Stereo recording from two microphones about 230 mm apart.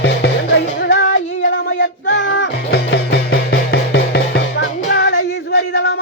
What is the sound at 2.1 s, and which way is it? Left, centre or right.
Music, left.